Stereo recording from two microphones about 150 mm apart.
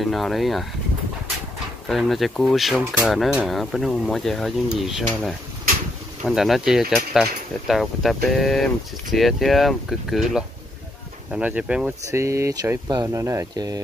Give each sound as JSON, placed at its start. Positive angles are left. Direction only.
{"t": 0.0, "sound": "speech", "side_deg": 0}
{"t": 1.9, "sound": "speech", "side_deg": 0}
{"t": 12.1, "sound": "speech", "side_deg": -20}